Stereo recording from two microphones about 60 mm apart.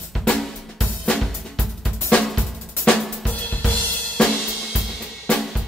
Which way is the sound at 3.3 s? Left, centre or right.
Left.